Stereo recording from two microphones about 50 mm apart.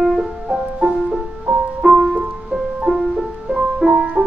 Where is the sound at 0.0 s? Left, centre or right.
Centre.